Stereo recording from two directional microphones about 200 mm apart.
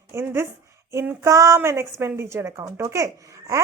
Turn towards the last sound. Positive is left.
turn(degrees=-15)  # may be behind; listen again after turning